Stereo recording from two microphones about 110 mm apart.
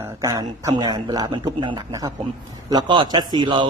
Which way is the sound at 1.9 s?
35° right (ahead or behind).